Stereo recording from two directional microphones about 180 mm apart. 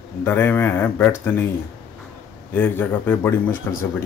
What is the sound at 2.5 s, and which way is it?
Speech, 10° left (ahead or behind).